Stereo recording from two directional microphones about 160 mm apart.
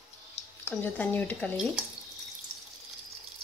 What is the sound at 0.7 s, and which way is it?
Speech, 10° left (ahead or behind).